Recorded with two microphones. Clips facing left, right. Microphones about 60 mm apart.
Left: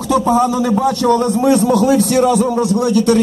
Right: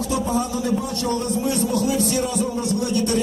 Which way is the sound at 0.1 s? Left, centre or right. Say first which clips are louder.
Left 12 dB; left.